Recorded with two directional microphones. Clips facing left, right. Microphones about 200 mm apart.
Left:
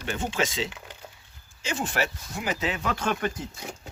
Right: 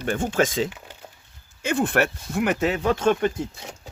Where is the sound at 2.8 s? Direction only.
25° right (ahead or behind).